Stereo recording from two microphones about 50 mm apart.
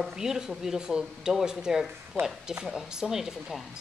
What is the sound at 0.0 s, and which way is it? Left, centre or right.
Speech, centre.